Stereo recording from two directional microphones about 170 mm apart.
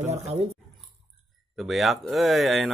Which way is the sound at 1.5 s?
Centre (ahead or behind).